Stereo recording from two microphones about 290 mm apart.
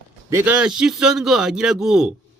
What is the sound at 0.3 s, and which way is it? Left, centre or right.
A man's voice, centre.